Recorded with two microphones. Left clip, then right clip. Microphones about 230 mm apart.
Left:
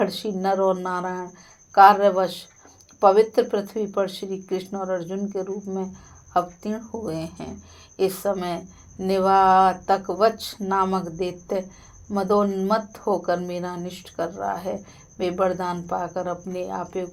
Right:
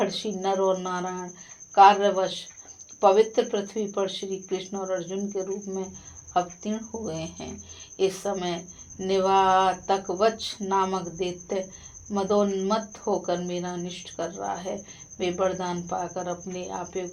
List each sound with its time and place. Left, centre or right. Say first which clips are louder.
0.0 s speech: left 3 dB; left